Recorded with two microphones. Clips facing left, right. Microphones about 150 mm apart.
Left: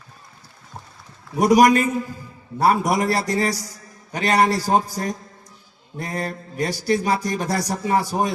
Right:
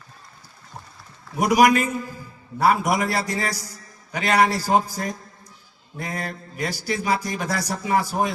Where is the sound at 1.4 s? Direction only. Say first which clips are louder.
Left 3 dB; 40° left (ahead or behind).